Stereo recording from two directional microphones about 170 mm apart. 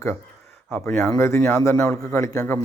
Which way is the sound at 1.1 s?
15° left (ahead or behind).